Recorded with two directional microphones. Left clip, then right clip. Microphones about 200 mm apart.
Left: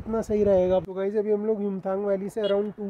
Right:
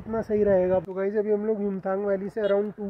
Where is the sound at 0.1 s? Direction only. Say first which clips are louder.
Even; 10° left (ahead or behind).